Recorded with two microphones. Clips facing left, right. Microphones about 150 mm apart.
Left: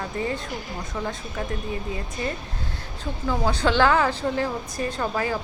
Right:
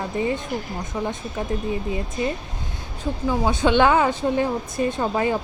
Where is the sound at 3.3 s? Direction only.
20° right (ahead or behind).